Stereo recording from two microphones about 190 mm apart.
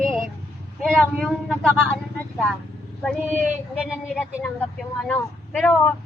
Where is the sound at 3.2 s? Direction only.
10° right (ahead or behind).